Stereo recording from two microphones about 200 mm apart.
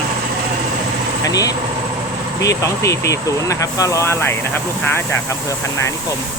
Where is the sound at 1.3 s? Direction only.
20° left (ahead or behind).